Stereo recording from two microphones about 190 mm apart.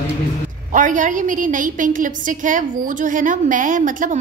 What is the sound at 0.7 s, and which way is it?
A woman's voice, 45° right (ahead or behind).